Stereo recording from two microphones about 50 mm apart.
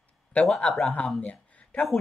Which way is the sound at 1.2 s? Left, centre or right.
Left.